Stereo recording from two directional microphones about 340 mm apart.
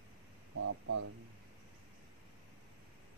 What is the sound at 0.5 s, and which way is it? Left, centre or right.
Speech, right.